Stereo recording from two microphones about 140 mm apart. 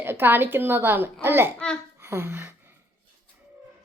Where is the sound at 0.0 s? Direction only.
15° right (ahead or behind).